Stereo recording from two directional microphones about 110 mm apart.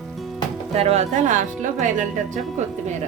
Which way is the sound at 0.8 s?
70° right (ahead or behind).